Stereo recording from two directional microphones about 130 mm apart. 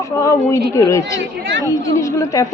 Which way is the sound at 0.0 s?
25° left (ahead or behind).